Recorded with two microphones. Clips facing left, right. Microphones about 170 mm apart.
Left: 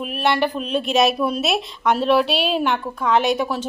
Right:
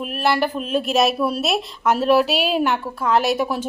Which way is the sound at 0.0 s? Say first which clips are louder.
Even; centre (ahead or behind).